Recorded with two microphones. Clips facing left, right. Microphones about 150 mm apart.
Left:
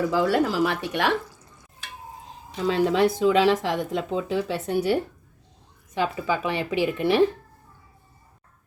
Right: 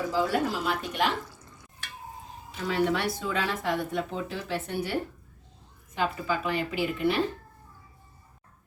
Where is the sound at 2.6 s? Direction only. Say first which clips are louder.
Left 6 dB; 90° left.